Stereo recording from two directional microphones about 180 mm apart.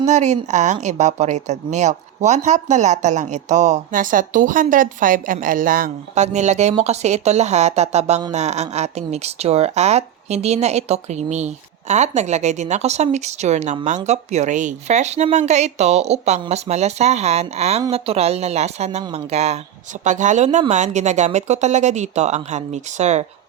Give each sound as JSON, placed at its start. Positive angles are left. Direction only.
{"t": 0.0, "sound": "a woman's voice", "side_deg": -40}